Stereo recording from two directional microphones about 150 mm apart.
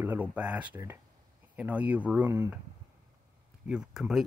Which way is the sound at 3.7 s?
5° right (ahead or behind).